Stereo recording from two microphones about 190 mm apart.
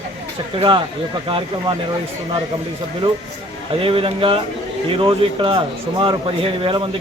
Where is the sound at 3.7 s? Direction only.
30° right (ahead or behind).